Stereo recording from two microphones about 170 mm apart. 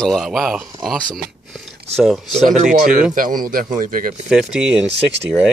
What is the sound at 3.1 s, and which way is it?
A man's voice, 55° right (ahead or behind).